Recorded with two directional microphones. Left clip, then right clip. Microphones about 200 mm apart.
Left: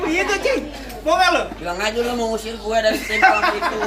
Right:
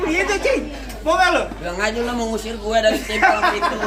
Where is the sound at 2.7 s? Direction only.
25° right (ahead or behind).